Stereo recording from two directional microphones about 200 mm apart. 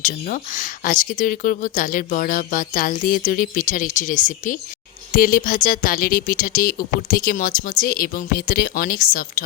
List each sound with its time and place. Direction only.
0.0 s speech: 40° left (ahead or behind)